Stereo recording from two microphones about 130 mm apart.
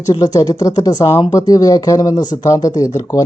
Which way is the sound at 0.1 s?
25° left (ahead or behind).